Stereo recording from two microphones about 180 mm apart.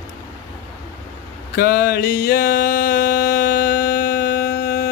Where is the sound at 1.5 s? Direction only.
60° left (ahead or behind).